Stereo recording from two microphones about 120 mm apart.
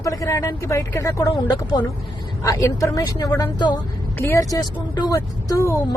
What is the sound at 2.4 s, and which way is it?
A woman's voice, 25° left (ahead or behind).